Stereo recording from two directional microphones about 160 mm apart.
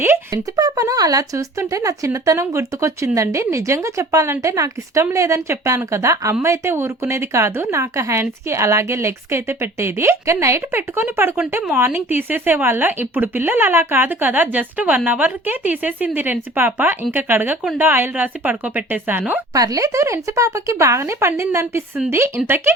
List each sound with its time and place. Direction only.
0.0 s speech: 15° right (ahead or behind)
19.5 s speech: 20° right (ahead or behind)